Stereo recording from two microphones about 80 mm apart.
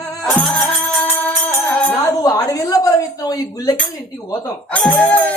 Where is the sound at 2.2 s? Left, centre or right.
Left.